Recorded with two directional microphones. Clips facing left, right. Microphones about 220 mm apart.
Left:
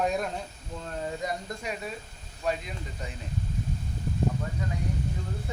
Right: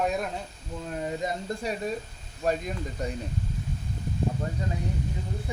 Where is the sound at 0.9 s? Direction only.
15° right (ahead or behind).